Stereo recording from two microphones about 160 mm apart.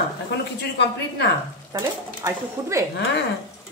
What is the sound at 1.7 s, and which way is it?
Speech, 20° right (ahead or behind).